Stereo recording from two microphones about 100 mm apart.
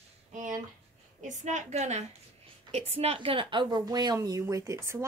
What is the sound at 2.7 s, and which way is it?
Speech, 90° right.